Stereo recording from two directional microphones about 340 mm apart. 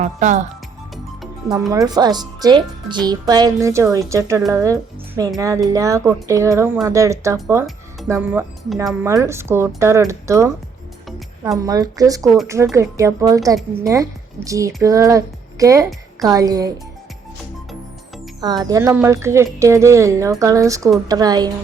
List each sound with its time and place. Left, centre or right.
0.0 s speech: right
1.5 s speech: centre
18.3 s speech: centre